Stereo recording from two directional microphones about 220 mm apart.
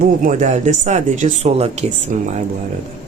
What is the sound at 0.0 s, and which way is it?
Speech, 35° right (ahead or behind).